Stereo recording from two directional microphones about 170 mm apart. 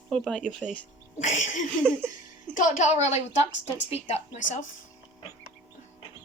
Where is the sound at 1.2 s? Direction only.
45° left (ahead or behind).